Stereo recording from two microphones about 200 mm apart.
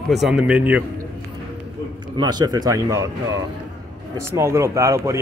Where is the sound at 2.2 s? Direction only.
20° right (ahead or behind).